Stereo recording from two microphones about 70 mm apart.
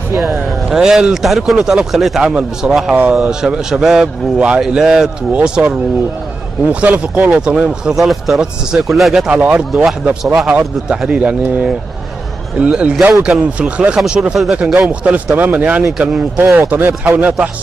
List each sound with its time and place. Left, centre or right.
0.7 s a man's voice: centre
9.1 s a man's voice: centre